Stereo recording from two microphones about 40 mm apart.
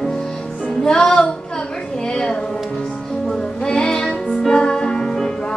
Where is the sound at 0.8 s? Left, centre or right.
Left.